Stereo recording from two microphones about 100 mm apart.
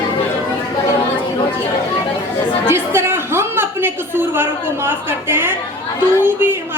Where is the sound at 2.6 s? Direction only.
25° right (ahead or behind).